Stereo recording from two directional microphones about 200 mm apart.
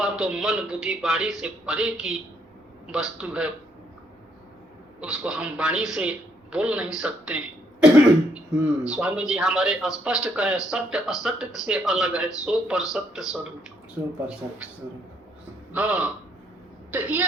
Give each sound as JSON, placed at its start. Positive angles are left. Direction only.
{"t": 0.0, "sound": "speech", "side_deg": -5}
{"t": 4.9, "sound": "speech", "side_deg": -5}
{"t": 15.7, "sound": "speech", "side_deg": -5}